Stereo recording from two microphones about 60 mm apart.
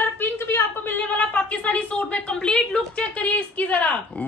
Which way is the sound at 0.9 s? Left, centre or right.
Left.